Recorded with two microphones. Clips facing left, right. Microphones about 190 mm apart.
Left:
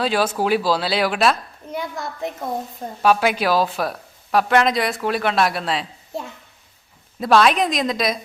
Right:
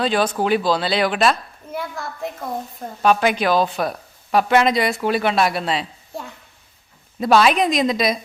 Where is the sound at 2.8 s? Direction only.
5° left (ahead or behind).